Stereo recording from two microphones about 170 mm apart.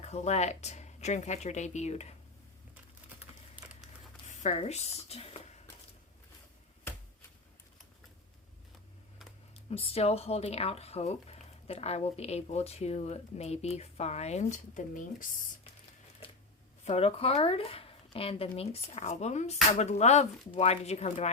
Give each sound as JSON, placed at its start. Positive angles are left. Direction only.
{"t": 0.0, "sound": "speech", "side_deg": 40}
{"t": 3.5, "sound": "a sound", "side_deg": -5}
{"t": 4.4, "sound": "speech", "side_deg": 40}
{"t": 9.6, "sound": "speech", "side_deg": 35}
{"t": 16.8, "sound": "speech", "side_deg": 40}